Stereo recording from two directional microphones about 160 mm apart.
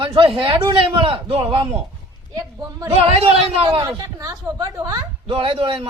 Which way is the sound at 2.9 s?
40° right (ahead or behind).